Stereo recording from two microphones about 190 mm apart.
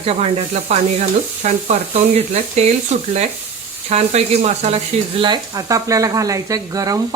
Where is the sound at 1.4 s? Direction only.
35° right (ahead or behind).